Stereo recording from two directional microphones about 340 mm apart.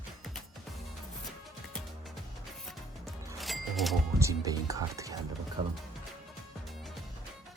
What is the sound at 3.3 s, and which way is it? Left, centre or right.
Speech, centre.